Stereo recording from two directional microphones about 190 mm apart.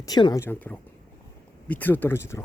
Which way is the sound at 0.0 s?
20° left (ahead or behind).